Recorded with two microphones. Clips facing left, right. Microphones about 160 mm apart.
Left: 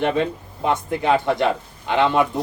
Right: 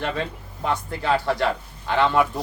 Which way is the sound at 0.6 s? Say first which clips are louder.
Left 4 dB; 20° left (ahead or behind).